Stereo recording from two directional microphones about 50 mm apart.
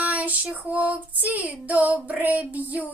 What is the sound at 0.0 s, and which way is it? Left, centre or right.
Child singing, right.